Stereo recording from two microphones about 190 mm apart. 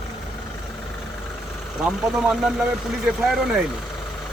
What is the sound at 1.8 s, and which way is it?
Speech, 5° right (ahead or behind).